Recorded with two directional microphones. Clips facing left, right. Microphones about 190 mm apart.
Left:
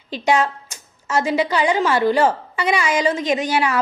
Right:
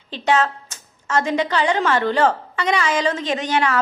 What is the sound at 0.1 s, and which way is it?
A woman's voice, 10° left (ahead or behind).